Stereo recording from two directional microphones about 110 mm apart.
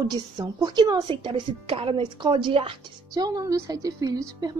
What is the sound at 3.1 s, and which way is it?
A woman's voice, 35° right (ahead or behind).